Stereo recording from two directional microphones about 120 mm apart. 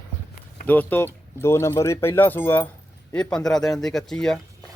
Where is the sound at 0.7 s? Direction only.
15° left (ahead or behind).